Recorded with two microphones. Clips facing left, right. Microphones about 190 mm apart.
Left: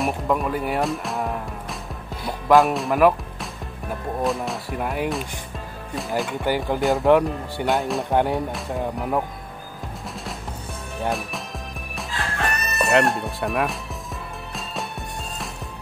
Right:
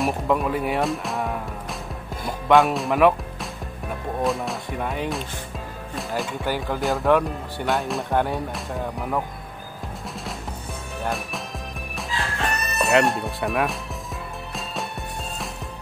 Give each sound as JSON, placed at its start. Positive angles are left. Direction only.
{"t": 0.0, "sound": "music", "side_deg": 0}
{"t": 2.4, "sound": "speech", "side_deg": 0}
{"t": 6.4, "sound": "speech", "side_deg": 15}
{"t": 6.8, "sound": "speech", "side_deg": 0}
{"t": 7.1, "sound": "speech", "side_deg": 15}
{"t": 7.7, "sound": "speech", "side_deg": 0}
{"t": 8.1, "sound": "speech", "side_deg": 15}
{"t": 8.5, "sound": "speech", "side_deg": 0}
{"t": 11.1, "sound": "speech", "side_deg": 0}
{"t": 12.4, "sound": "music", "side_deg": 0}